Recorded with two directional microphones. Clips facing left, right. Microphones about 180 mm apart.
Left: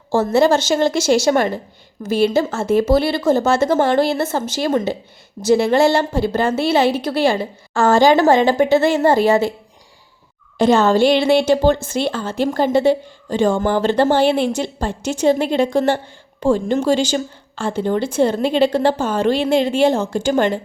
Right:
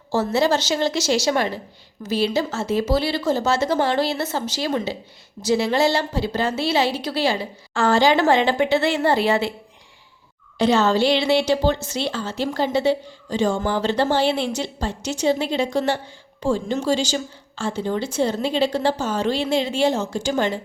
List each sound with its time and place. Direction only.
0.1 s a woman's voice: 50° left (ahead or behind)
10.6 s a woman's voice: 50° left (ahead or behind)